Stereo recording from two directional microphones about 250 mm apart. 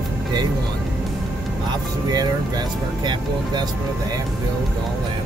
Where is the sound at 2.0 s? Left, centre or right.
Centre.